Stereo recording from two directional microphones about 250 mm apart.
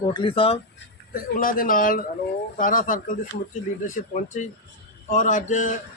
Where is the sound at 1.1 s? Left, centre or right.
Left.